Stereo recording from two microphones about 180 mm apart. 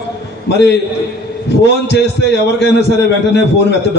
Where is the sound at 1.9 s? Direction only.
70° left (ahead or behind).